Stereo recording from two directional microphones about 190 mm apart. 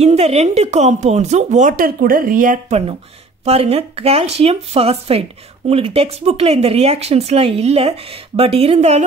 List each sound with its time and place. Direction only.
0.0 s speech: 35° right (ahead or behind)
3.4 s speech: 30° right (ahead or behind)